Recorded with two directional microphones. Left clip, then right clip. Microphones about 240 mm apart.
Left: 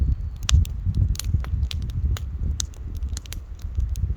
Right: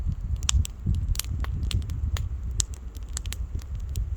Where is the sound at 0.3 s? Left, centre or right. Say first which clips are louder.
Left 1 dB; right.